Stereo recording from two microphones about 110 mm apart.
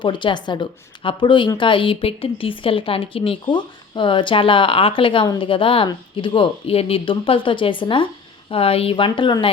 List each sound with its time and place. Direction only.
0.0 s a woman's voice: 45° left (ahead or behind)